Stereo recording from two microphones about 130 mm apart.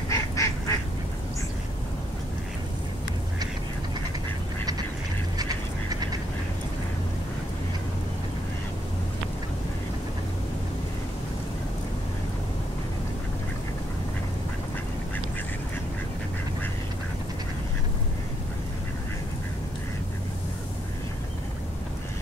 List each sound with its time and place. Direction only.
0.1 s duck: 25° left (ahead or behind)
5.4 s duck: 30° right (ahead or behind)